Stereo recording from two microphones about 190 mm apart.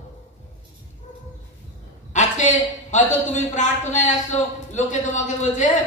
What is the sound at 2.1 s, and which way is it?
A man's voice, 40° left (ahead or behind).